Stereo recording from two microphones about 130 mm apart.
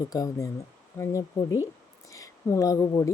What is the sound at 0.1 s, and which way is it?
Speech, 25° left (ahead or behind).